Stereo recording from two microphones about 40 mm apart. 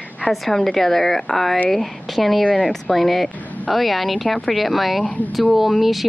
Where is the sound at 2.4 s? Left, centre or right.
Left.